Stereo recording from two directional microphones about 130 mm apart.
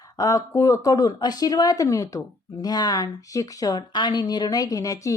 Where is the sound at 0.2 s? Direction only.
25° left (ahead or behind).